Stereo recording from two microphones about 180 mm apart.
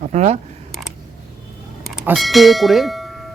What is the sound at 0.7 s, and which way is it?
Creak, centre (ahead or behind).